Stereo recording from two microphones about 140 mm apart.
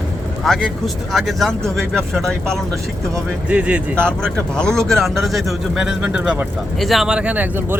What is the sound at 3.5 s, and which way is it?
Speech, 10° right (ahead or behind).